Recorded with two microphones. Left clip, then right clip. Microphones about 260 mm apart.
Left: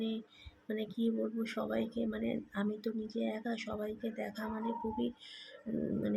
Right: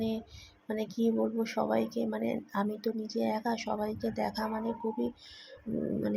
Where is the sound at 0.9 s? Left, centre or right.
Centre.